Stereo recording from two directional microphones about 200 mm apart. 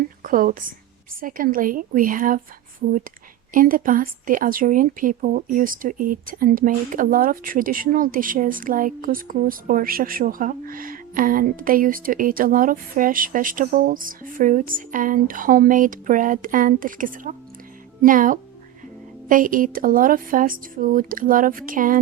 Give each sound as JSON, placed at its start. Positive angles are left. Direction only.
{"t": 0.2, "sound": "a woman's voice", "side_deg": -45}